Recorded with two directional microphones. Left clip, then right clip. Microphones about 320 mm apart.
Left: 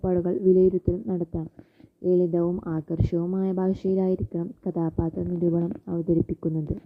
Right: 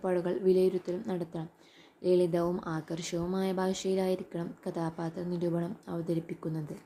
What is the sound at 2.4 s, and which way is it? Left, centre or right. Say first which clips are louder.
Speech: left 5 dB; centre.